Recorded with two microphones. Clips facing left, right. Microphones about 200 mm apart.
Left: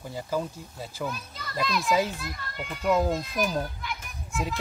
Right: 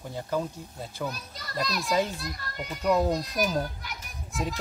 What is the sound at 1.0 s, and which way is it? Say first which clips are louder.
Speech: left 1 dB; 40° right (ahead or behind).